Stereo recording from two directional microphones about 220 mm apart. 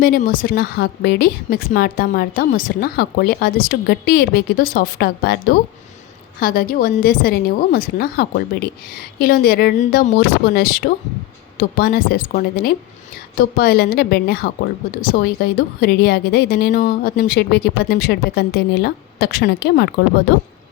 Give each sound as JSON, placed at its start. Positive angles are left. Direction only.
{"t": 0.0, "sound": "a woman's voice", "side_deg": 40}